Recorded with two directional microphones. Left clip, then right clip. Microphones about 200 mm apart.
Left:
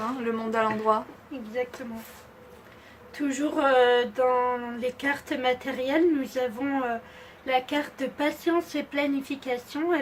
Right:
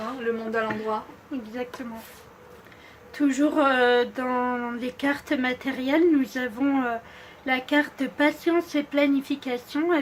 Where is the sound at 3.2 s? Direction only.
25° right (ahead or behind).